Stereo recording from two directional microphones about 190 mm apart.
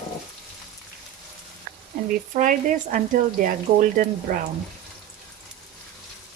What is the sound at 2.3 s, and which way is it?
Speech, 45° right (ahead or behind).